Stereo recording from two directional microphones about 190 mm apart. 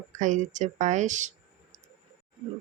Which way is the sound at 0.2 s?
40° right (ahead or behind).